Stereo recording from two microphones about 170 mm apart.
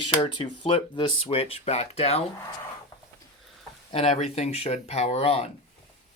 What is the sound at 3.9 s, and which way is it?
Speech, 40° left (ahead or behind).